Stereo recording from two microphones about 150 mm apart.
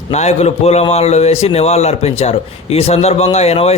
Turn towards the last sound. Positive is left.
turn(degrees=45)  # may be behind; listen again after turning